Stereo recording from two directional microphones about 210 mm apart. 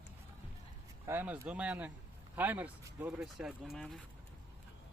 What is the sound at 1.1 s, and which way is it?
Speech, 10° right (ahead or behind).